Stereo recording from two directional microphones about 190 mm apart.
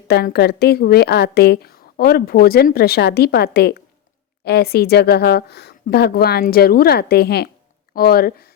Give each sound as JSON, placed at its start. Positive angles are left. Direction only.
{"t": 0.1, "sound": "a woman's voice", "side_deg": 60}